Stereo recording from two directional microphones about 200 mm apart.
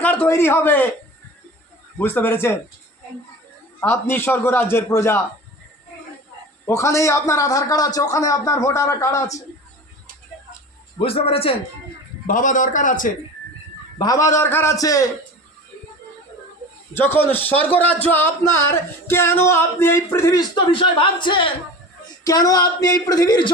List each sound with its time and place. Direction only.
0.0 s speech: 10° left (ahead or behind)
2.0 s speech: 10° left (ahead or behind)
3.8 s speech: 10° left (ahead or behind)
6.7 s speech: 15° left (ahead or behind)
10.9 s speech: 30° left (ahead or behind)
12.3 s a man's voice: 40° left (ahead or behind)
14.0 s speech: 15° left (ahead or behind)
16.9 s speech: 10° left (ahead or behind)